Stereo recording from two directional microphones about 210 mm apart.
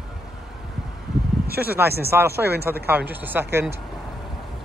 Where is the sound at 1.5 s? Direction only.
50° right (ahead or behind).